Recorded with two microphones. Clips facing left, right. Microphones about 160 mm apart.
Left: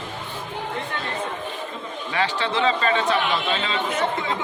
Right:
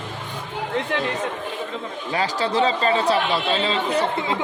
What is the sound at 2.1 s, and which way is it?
A man's voice, 40° right (ahead or behind).